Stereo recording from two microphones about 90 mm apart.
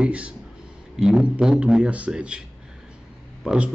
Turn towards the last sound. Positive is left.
turn(degrees=-10)  # may be behind; listen again after turning